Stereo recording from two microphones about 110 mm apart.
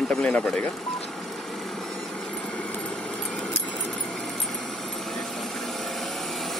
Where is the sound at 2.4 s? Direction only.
10° left (ahead or behind).